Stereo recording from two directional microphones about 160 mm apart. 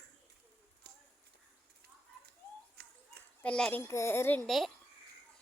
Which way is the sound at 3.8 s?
15° left (ahead or behind).